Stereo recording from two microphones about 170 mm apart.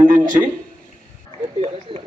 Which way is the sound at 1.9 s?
30° right (ahead or behind).